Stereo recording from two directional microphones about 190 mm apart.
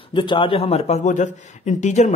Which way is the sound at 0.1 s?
25° left (ahead or behind).